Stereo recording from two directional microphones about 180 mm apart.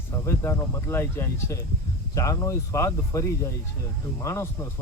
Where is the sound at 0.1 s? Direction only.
15° left (ahead or behind).